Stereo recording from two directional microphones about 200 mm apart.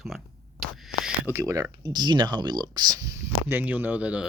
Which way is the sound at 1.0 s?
10° right (ahead or behind).